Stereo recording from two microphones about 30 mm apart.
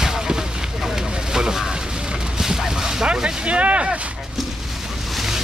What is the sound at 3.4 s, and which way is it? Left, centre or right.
Speech, right.